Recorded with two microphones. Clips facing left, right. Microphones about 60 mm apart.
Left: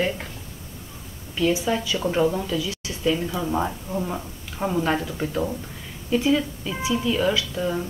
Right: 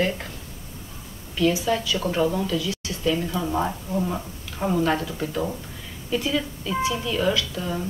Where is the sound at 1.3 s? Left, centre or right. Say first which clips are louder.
Even; left.